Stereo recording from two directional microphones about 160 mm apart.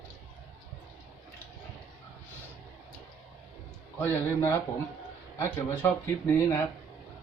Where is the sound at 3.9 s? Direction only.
15° left (ahead or behind).